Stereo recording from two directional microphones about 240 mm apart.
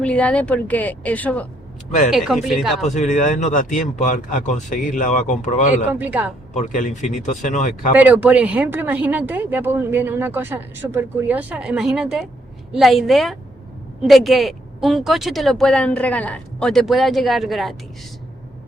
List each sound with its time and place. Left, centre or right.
0.0 s speech: centre
2.8 s speech: left
5.9 s speech: centre
6.5 s speech: left
7.9 s speech: centre